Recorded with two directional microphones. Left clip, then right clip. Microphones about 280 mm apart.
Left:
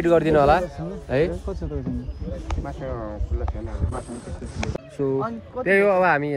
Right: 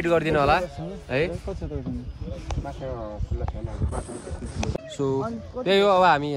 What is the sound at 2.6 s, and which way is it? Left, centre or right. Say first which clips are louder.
Speech: left 1 dB; right.